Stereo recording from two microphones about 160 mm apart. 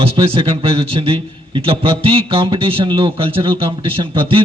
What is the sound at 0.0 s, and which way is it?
A man's voice, 35° right (ahead or behind).